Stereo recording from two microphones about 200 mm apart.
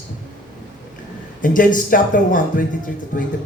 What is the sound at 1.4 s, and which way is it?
Speech, 40° left (ahead or behind).